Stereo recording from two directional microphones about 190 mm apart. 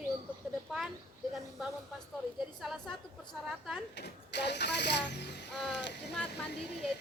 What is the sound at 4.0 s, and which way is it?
Speech, 60° left (ahead or behind).